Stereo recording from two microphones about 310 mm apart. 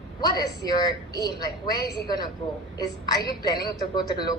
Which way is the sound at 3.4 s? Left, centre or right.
Centre.